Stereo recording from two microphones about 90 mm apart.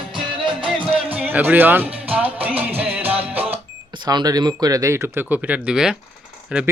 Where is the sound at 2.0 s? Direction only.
15° right (ahead or behind).